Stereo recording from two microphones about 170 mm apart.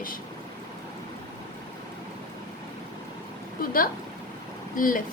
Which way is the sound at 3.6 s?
55° left (ahead or behind).